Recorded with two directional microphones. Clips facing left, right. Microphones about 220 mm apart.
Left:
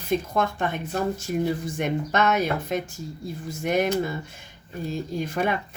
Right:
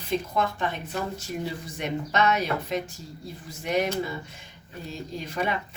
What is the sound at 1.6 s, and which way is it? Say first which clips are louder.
Speech: left 4 dB; 50° left (ahead or behind).